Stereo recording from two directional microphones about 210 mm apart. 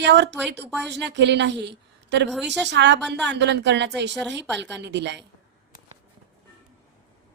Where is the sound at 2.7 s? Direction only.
55° right (ahead or behind).